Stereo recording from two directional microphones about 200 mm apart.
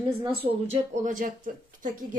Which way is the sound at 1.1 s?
40° right (ahead or behind).